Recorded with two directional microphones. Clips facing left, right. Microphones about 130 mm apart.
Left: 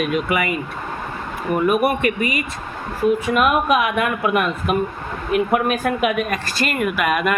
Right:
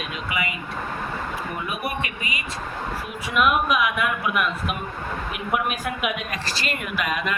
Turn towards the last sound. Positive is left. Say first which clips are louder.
# left 7 dB
turn(degrees=55)  # may be behind; listen again after turning